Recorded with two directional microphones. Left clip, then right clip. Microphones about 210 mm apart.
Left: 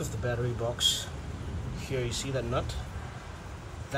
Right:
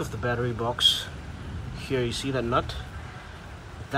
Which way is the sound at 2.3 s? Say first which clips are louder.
Right 7 dB; centre (ahead or behind).